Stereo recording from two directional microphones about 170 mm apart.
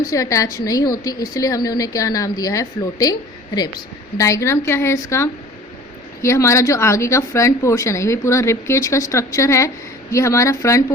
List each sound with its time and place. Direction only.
0.1 s a woman's voice: 20° left (ahead or behind)
6.2 s speech: 15° left (ahead or behind)